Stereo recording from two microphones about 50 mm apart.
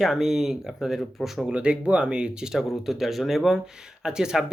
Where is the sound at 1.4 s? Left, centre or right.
Right.